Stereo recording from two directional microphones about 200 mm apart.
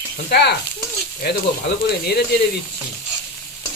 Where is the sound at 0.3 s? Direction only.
55° left (ahead or behind).